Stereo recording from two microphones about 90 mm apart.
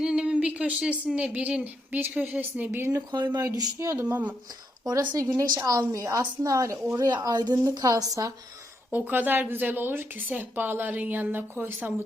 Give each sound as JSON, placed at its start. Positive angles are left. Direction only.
{"t": 0.0, "sound": "a woman's voice", "side_deg": -10}
{"t": 2.9, "sound": "a woman's voice", "side_deg": -45}
{"t": 3.9, "sound": "a woman's voice", "side_deg": -20}
{"t": 4.9, "sound": "speech", "side_deg": -40}
{"t": 7.3, "sound": "a woman's voice", "side_deg": -50}
{"t": 8.9, "sound": "a woman's voice", "side_deg": -20}